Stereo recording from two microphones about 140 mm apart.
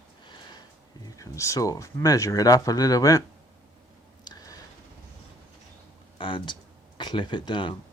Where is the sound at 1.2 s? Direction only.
20° left (ahead or behind).